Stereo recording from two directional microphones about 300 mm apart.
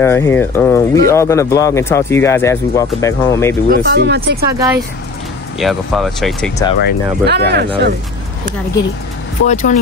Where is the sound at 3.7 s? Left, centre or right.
Right.